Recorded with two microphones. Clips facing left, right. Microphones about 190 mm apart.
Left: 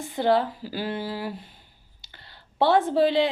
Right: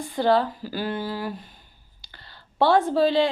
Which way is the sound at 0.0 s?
20° left (ahead or behind).